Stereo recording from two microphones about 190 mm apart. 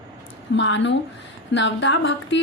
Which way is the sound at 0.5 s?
75° left (ahead or behind).